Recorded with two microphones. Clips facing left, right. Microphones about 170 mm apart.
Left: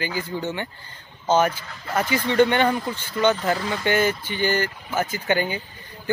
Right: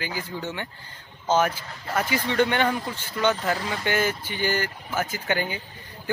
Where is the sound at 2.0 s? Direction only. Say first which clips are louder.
Left 4 dB; centre (ahead or behind).